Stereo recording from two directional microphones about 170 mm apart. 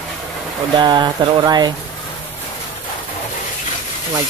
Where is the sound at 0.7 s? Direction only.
25° right (ahead or behind).